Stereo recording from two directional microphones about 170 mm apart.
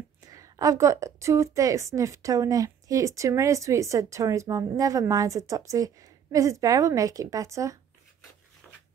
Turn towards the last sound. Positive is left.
turn(degrees=-20)  # may be behind; listen again after turning